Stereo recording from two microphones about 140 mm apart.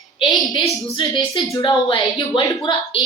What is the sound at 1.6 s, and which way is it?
Speech, 40° left (ahead or behind).